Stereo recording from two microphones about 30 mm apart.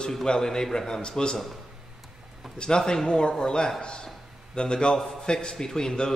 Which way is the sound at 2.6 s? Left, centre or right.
Left.